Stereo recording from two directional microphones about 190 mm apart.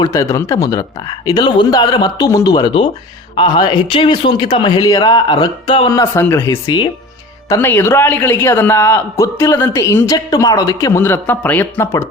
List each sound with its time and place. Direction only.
0.0 s speech: 15° left (ahead or behind)
5.9 s a man's voice: 15° left (ahead or behind)